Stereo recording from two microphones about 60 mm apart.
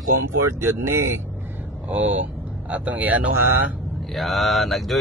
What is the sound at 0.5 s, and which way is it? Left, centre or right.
Speech, right.